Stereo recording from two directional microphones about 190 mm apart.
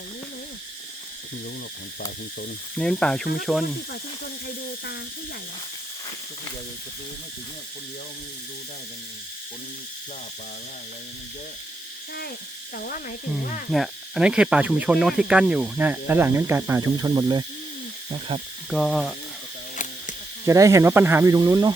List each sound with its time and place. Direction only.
2.7 s speech: 5° left (ahead or behind)
12.7 s speech: 50° left (ahead or behind)
13.7 s speech: centre (ahead or behind); by 18.4 s 30° right (ahead or behind)
18.7 s speech: centre (ahead or behind)
19.7 s a sound: 40° left (ahead or behind)
20.5 s speech: 15° right (ahead or behind)